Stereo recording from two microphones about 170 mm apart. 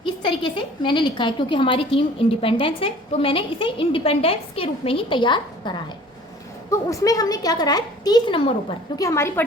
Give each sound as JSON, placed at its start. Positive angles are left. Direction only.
{"t": 0.0, "sound": "a woman's voice", "side_deg": 30}
{"t": 9.0, "sound": "a woman's voice", "side_deg": 15}